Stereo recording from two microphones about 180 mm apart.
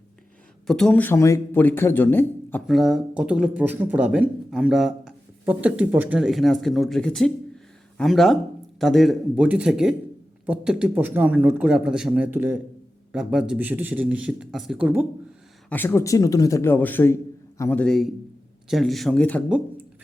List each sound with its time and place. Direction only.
0.7 s speech: 5° left (ahead or behind)
2.6 s a man's voice: centre (ahead or behind)
15.7 s speech: 10° left (ahead or behind)